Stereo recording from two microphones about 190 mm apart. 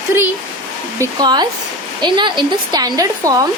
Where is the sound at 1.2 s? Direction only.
20° right (ahead or behind).